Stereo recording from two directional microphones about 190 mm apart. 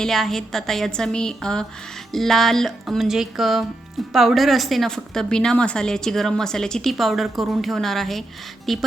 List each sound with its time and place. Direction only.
0.0 s a woman's voice: centre (ahead or behind)